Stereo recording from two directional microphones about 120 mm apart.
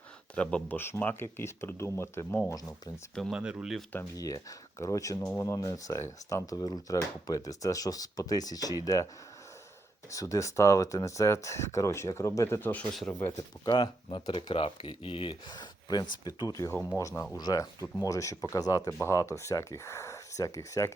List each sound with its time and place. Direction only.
0.3 s speech: 10° left (ahead or behind)
3.2 s speech: 5° right (ahead or behind)
4.1 s speech: 30° left (ahead or behind)
10.1 s speech: 25° left (ahead or behind)
12.9 s speech: centre (ahead or behind)
13.7 s speech: 40° left (ahead or behind); by 20.9 s 25° left (ahead or behind)